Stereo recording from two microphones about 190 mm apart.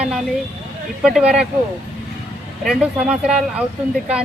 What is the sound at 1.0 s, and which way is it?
Speech, 5° right (ahead or behind).